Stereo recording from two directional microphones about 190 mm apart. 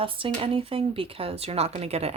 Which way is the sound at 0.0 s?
30° right (ahead or behind).